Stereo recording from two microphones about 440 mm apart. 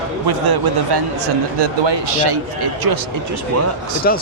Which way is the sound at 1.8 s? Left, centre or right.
Right.